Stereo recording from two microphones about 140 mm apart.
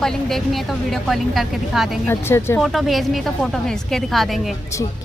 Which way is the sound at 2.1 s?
15° left (ahead or behind).